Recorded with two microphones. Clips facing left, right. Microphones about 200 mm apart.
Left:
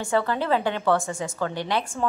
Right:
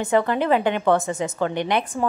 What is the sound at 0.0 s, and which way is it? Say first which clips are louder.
A woman's voice: right 4 dB; 20° right (ahead or behind).